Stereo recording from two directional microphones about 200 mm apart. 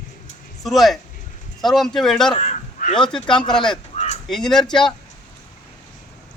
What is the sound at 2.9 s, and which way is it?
Speech, 5° left (ahead or behind).